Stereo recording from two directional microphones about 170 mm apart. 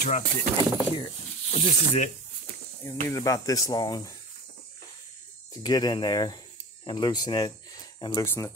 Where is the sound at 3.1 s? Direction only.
20° left (ahead or behind).